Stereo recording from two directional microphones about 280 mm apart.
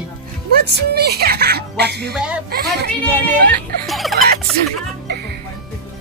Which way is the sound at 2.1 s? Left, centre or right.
Centre.